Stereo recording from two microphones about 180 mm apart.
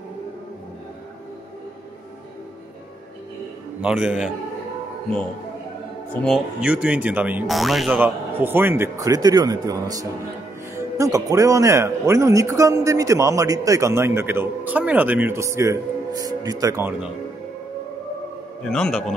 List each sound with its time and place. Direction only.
3.8 s speech: 5° right (ahead or behind)
6.2 s speech: 5° right (ahead or behind)
8.4 s a man's voice: 10° right (ahead or behind)
18.6 s speech: 5° left (ahead or behind)